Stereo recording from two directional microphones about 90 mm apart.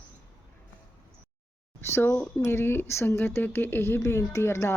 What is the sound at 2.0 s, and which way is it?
Speech, 25° left (ahead or behind).